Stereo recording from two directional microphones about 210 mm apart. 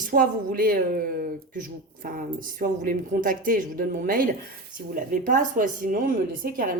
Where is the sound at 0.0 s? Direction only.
40° right (ahead or behind).